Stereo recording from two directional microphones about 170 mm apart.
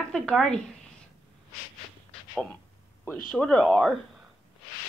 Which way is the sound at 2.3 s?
5° left (ahead or behind).